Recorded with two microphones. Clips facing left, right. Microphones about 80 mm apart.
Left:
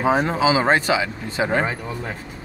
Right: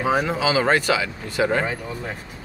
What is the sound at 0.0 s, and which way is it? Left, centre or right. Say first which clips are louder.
Speech: left 3 dB; left.